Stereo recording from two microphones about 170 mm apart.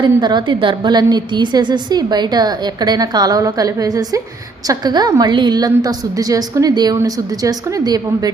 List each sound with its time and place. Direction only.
0.0 s a woman's voice: 25° right (ahead or behind)